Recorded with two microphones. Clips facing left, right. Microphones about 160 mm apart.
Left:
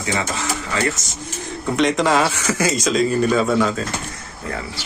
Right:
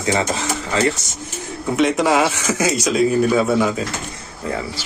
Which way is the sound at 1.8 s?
5° right (ahead or behind).